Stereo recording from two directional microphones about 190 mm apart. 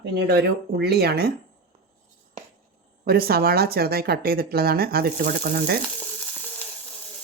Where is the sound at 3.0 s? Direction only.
55° right (ahead or behind).